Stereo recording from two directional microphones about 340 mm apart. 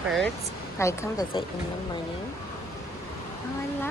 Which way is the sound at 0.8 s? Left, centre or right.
Centre.